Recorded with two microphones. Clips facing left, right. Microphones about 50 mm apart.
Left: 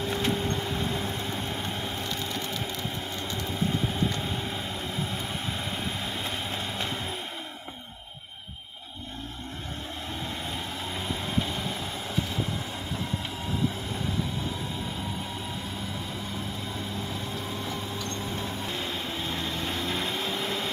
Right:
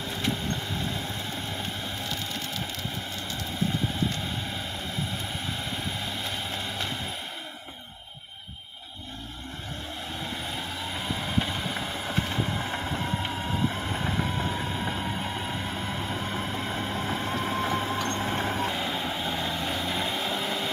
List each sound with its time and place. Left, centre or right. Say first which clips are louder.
11.3 s vehicle: right 1 dB; centre
16.3 s vehicle: right 4 dB; right
18.7 s vehicle: right 3 dB; centre